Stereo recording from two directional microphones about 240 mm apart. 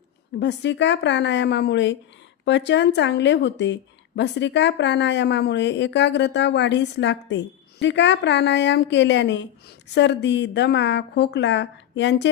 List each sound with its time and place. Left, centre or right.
0.3 s a woman's voice: left